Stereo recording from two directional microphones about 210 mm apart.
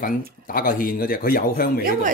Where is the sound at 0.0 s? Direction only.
40° left (ahead or behind).